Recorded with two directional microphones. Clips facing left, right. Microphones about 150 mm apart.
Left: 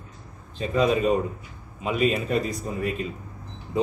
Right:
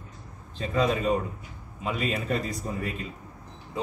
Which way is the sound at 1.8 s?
15° left (ahead or behind).